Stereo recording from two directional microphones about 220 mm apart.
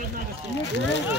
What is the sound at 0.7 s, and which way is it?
Speech, 55° left (ahead or behind).